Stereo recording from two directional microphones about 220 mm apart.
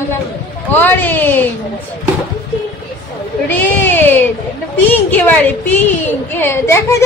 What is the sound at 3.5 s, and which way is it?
A woman's voice, 10° left (ahead or behind).